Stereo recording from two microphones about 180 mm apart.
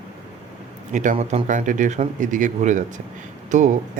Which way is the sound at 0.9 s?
45° right (ahead or behind).